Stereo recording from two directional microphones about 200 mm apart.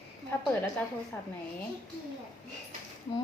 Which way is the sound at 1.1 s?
10° left (ahead or behind).